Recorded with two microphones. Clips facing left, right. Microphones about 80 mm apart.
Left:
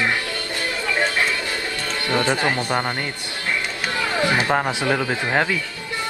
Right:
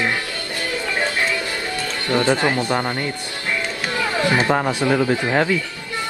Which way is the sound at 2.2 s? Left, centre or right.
Right.